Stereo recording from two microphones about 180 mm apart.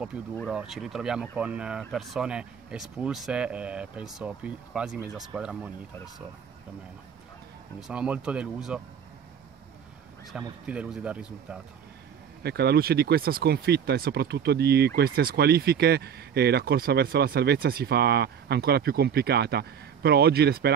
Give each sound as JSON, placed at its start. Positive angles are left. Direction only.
{"t": 0.1, "sound": "speech", "side_deg": -5}
{"t": 7.8, "sound": "speech", "side_deg": -5}
{"t": 10.3, "sound": "speech", "side_deg": -5}
{"t": 12.4, "sound": "speech", "side_deg": -65}